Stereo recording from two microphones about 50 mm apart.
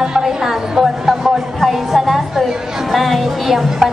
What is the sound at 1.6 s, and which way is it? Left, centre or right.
Music, centre.